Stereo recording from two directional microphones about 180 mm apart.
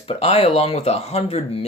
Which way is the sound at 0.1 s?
35° left (ahead or behind).